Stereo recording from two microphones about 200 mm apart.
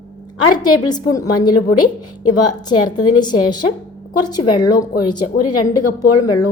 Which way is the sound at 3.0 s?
20° left (ahead or behind).